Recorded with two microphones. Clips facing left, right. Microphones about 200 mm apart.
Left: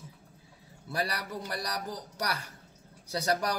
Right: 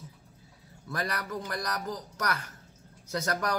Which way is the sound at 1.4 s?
30° left (ahead or behind).